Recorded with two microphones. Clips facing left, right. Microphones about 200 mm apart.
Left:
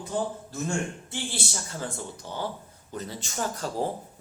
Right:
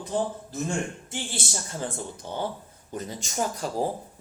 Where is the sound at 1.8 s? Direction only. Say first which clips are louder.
Right 2 dB; 20° right (ahead or behind).